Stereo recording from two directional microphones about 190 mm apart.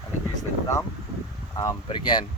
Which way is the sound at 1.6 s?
20° left (ahead or behind).